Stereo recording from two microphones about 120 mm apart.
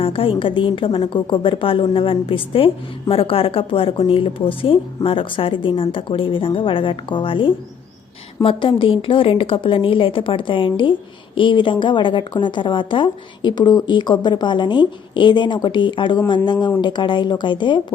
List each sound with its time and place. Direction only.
0.0 s a woman's voice: 50° left (ahead or behind)